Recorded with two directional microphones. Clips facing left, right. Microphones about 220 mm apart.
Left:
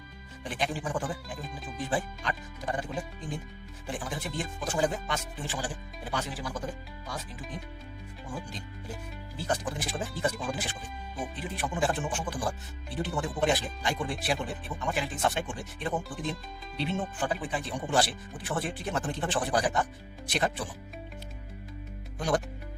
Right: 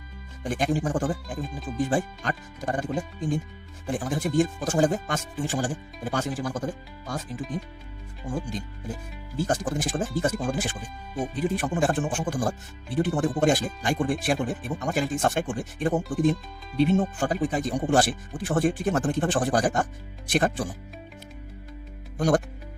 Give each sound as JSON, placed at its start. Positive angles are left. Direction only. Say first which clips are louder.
{"t": 0.4, "sound": "speech", "louder": "right 7 dB", "side_deg": -45}
{"t": 9.4, "sound": "speech", "louder": "right 6 dB", "side_deg": -45}